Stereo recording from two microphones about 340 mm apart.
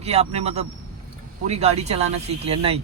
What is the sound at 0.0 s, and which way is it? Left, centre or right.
Speech, centre.